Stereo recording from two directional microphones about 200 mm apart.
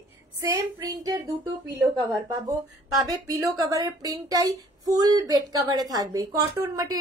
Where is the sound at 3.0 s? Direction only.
15° right (ahead or behind).